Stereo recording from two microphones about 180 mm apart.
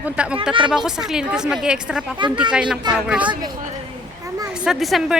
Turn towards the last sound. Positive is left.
turn(degrees=0)  # may be behind; listen again after turning